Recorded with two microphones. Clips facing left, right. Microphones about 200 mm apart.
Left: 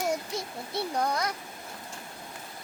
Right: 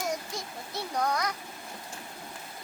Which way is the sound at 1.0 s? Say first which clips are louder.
Right 2 dB; 25° left (ahead or behind).